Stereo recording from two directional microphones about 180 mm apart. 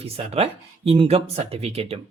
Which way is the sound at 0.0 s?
35° right (ahead or behind).